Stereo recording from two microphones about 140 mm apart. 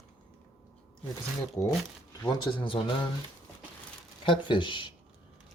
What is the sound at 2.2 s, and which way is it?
Speech, 35° left (ahead or behind).